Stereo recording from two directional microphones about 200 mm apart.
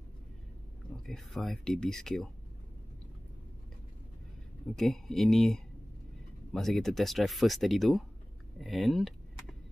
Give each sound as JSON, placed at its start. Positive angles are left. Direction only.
{"t": 1.0, "sound": "speech", "side_deg": 0}
{"t": 4.7, "sound": "speech", "side_deg": 0}